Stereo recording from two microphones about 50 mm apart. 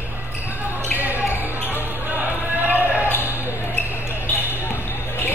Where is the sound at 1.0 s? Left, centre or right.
Right.